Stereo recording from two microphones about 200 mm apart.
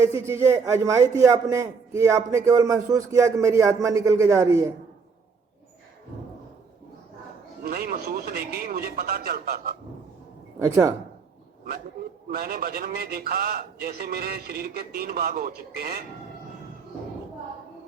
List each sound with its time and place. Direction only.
0.0 s a man's voice: 15° right (ahead or behind)
7.6 s a man's voice: 50° right (ahead or behind)
10.6 s a man's voice: 15° right (ahead or behind)
12.3 s a man's voice: 50° right (ahead or behind)